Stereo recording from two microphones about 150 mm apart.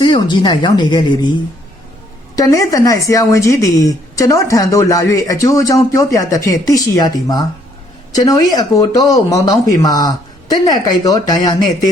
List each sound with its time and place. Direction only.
0.0 s a woman's voice: 30° left (ahead or behind)
2.3 s a woman's voice: 25° left (ahead or behind)